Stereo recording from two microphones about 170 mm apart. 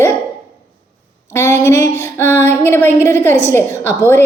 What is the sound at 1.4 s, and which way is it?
A woman's voice, 15° left (ahead or behind).